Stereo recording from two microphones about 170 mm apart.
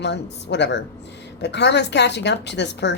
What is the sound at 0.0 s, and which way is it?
Speech, 90° left.